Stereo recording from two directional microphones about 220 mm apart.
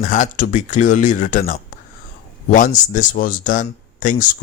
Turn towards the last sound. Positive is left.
turn(degrees=35)  # may be behind; listen again after turning